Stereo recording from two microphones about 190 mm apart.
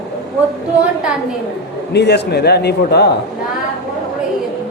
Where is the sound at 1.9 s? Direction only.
60° left (ahead or behind).